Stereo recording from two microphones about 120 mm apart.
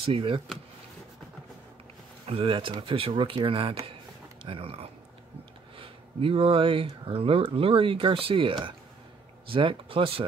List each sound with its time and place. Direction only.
0.0 s speech: 50° right (ahead or behind)
2.2 s speech: 50° right (ahead or behind)